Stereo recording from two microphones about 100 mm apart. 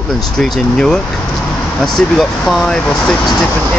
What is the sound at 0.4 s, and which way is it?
Speech, 5° left (ahead or behind).